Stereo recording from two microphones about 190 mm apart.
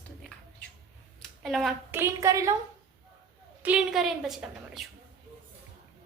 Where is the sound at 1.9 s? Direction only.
15° right (ahead or behind).